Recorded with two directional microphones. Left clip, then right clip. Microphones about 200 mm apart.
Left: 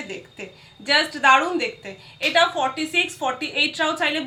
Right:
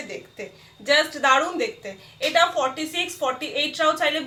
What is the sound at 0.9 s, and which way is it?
Speech, 10° right (ahead or behind).